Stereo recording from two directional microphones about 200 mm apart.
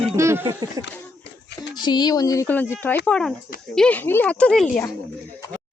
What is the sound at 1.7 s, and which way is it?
Speech, 20° left (ahead or behind).